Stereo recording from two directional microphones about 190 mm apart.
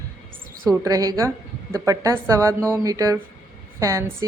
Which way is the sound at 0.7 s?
20° right (ahead or behind).